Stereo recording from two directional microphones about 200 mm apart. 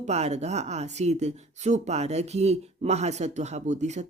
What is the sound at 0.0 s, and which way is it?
Speech, 35° right (ahead or behind).